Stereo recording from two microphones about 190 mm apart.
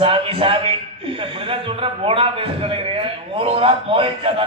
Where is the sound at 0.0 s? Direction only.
30° right (ahead or behind).